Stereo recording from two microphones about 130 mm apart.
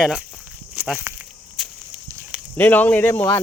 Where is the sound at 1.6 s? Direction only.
Centre (ahead or behind).